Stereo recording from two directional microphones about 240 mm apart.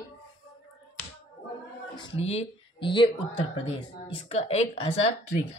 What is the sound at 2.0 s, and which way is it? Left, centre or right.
Speech, left.